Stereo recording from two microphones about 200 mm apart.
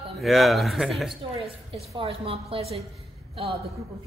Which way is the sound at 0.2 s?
Centre (ahead or behind).